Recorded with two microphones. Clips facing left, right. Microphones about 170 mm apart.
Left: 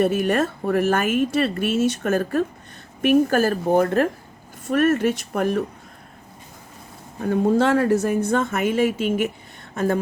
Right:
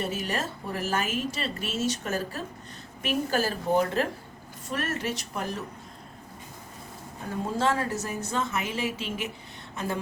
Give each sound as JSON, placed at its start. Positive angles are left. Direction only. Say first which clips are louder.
{"t": 0.0, "sound": "a woman's voice", "louder": "left 11 dB", "side_deg": 55}
{"t": 7.3, "sound": "a woman's voice", "louder": "left 9 dB", "side_deg": 60}